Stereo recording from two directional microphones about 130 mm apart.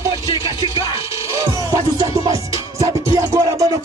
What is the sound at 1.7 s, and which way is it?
Music, 25° right (ahead or behind).